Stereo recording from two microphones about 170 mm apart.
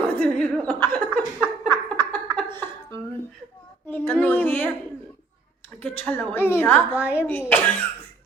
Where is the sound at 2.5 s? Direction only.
15° left (ahead or behind).